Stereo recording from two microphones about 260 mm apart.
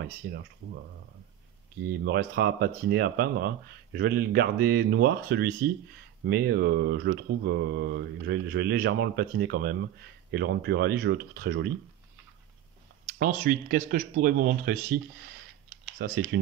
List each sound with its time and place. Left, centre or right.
0.2 s speech: right
1.8 s speech: right
13.4 s speech: right
16.0 s speech: right